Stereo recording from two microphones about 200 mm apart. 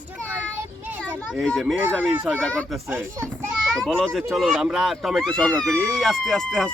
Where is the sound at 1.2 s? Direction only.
Centre (ahead or behind).